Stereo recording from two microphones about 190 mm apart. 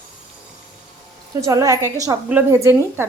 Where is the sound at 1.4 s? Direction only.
15° right (ahead or behind).